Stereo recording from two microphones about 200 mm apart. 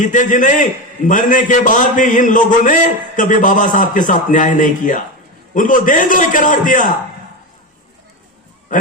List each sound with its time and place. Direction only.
0.0 s a man's voice: 40° left (ahead or behind)